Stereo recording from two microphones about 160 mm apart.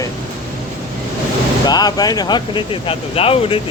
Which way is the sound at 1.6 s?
25° left (ahead or behind).